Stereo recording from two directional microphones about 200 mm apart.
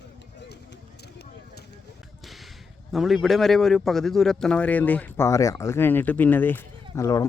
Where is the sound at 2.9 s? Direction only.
Centre (ahead or behind).